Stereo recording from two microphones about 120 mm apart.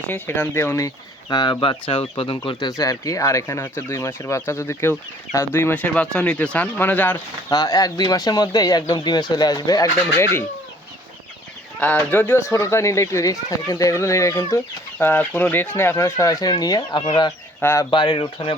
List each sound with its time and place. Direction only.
0.1 s speech: 20° left (ahead or behind); by 1.8 s 35° left (ahead or behind)
1.9 s speech: 45° left (ahead or behind)
2.6 s speech: 30° left (ahead or behind); by 7.2 s 15° left (ahead or behind)
7.5 s speech: 30° left (ahead or behind)
11.8 s speech: 15° left (ahead or behind)
14.9 s speech: 15° left (ahead or behind); by 17.3 s 40° left (ahead or behind)
17.6 s speech: 20° left (ahead or behind)
17.9 s speech: 40° left (ahead or behind)